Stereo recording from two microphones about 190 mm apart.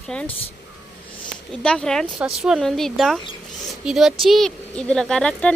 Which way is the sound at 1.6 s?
5° left (ahead or behind).